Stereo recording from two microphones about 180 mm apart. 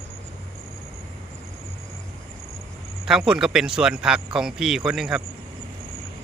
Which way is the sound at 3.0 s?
5° right (ahead or behind).